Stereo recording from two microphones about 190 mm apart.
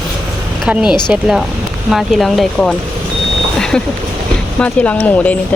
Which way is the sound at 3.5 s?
5° left (ahead or behind).